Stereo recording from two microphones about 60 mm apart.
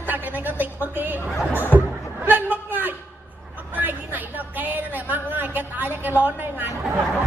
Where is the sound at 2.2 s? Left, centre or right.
Right.